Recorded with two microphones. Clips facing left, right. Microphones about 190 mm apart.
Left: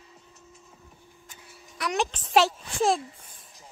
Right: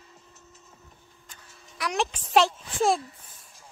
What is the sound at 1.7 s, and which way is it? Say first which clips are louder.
A child's voice: even; centre (ahead or behind).